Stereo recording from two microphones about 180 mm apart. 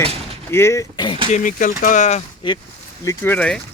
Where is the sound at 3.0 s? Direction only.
15° left (ahead or behind).